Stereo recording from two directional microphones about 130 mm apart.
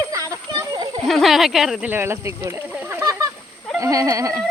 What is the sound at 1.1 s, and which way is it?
Speech, centre (ahead or behind).